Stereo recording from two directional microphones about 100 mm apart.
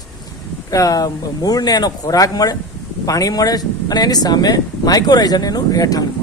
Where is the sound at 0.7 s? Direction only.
35° left (ahead or behind).